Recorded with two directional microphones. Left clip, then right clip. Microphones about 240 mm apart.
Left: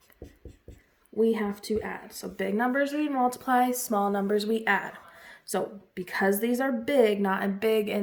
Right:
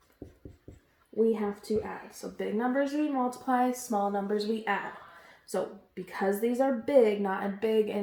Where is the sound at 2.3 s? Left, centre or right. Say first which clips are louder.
Left 3 dB; left.